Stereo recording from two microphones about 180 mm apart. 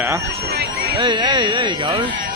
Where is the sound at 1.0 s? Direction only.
25° right (ahead or behind).